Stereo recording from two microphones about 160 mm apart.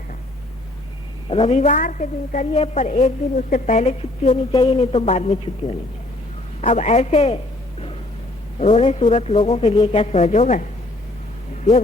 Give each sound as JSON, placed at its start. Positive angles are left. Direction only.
{"t": 1.3, "sound": "a woman's voice", "side_deg": 40}